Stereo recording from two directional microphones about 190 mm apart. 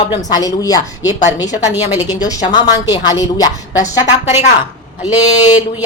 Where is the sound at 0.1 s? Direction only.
20° left (ahead or behind).